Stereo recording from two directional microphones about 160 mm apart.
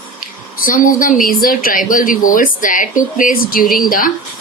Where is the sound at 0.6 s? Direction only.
60° left (ahead or behind).